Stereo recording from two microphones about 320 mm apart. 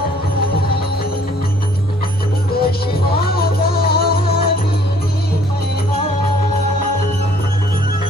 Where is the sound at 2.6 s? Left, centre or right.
Left.